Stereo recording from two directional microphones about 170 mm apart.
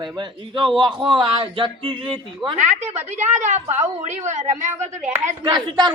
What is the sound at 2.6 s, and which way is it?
A woman's voice, 45° right (ahead or behind).